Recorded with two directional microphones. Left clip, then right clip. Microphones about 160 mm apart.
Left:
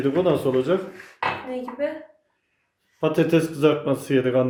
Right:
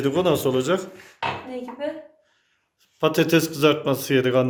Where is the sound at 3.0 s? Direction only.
5° right (ahead or behind).